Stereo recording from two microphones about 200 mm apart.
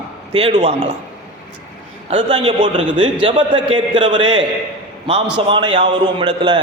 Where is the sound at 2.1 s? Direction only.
25° right (ahead or behind).